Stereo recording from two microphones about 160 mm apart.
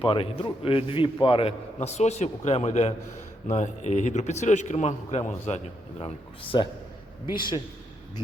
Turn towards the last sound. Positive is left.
turn(degrees=30)  # may be behind; listen again after turning